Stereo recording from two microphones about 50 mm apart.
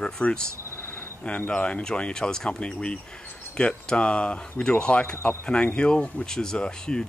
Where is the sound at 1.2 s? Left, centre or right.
Left.